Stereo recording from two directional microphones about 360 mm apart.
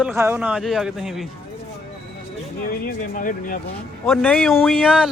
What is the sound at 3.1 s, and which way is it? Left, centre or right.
Speech, left.